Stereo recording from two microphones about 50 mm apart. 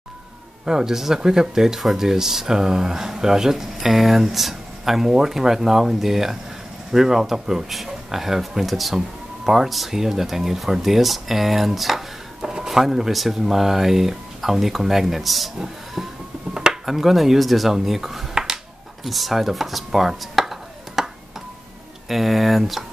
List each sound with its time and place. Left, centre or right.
0.7 s speech: centre
12.4 s a sound: centre
12.6 s speech: centre
22.1 s speech: centre